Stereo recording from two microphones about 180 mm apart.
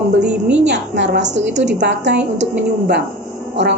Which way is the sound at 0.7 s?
75° right (ahead or behind).